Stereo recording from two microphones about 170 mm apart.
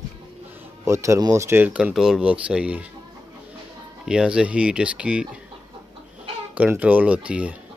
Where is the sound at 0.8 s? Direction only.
15° right (ahead or behind).